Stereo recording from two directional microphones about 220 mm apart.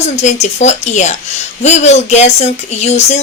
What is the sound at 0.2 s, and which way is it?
Speech, 30° left (ahead or behind).